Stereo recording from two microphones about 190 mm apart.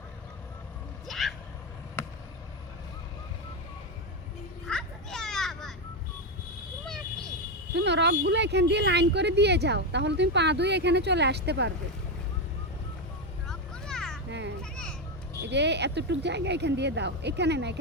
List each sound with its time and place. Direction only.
1.0 s a sound: centre (ahead or behind)
2.0 s chop: 10° left (ahead or behind)
4.6 s children playing: centre (ahead or behind)
6.8 s vehicle: 5° left (ahead or behind)
7.7 s speech: 65° right (ahead or behind)
13.5 s vehicle: 5° left (ahead or behind)
14.3 s children playing: 70° right (ahead or behind)
14.6 s a sound: 5° left (ahead or behind)
15.4 s speech: 65° right (ahead or behind)